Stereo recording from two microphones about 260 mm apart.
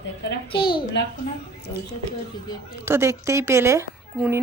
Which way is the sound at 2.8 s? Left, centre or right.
Centre.